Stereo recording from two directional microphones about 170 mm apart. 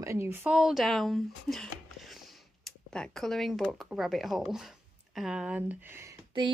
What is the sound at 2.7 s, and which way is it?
Speech, 5° left (ahead or behind).